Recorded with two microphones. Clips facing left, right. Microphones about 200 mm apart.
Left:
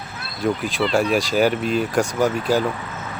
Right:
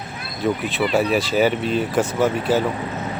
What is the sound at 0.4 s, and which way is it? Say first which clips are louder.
Speech: even; centre (ahead or behind).